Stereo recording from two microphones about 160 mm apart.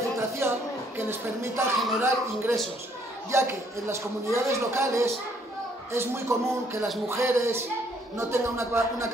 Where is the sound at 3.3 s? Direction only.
15° right (ahead or behind).